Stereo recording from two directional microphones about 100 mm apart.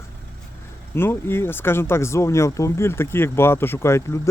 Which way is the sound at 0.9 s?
25° left (ahead or behind).